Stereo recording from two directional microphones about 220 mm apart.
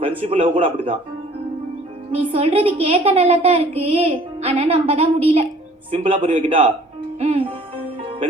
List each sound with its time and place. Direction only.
0.2 s a woman's voice: 25° right (ahead or behind)
2.1 s a woman's voice: 25° right (ahead or behind)